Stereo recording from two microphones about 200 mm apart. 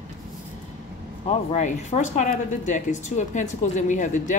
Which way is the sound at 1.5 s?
35° left (ahead or behind).